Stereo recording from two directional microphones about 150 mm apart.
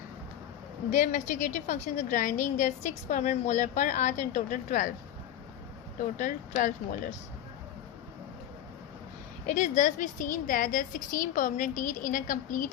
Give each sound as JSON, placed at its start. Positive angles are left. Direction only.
{"t": 0.9, "sound": "a woman's voice", "side_deg": 55}
{"t": 6.1, "sound": "a woman's voice", "side_deg": 60}
{"t": 9.5, "sound": "a woman's voice", "side_deg": 55}